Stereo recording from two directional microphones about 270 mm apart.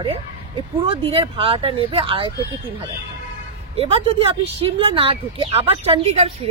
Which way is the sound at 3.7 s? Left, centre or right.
Right.